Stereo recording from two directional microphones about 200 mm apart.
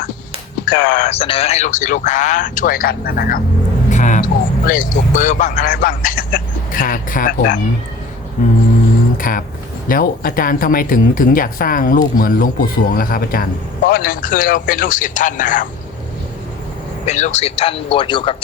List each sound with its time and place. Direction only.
0.7 s speech: 50° left (ahead or behind)
1.0 s speech: 30° left (ahead or behind); by 3.4 s 45° left (ahead or behind)
3.8 s vehicle: 35° left (ahead or behind)
4.7 s speech: 40° left (ahead or behind)
9.1 s a sound: 45° left (ahead or behind)
9.9 s speech: 45° left (ahead or behind)
17.1 s speech: 35° left (ahead or behind)